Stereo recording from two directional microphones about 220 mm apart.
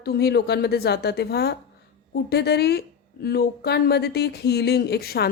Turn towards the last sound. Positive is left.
turn(degrees=45)  # may be behind; listen again after turning